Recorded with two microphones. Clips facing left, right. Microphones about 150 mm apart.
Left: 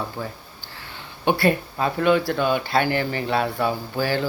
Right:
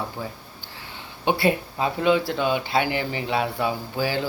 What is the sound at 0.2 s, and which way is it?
Speech, 15° right (ahead or behind).